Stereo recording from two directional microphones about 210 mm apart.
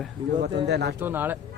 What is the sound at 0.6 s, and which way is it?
Speech, 55° right (ahead or behind).